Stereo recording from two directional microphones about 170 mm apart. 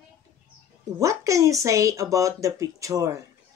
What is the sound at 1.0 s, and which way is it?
Speech, 20° right (ahead or behind).